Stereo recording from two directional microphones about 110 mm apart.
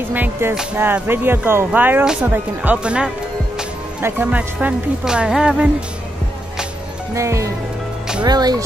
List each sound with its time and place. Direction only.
0.1 s speech: 20° right (ahead or behind)
7.2 s speech: 30° right (ahead or behind)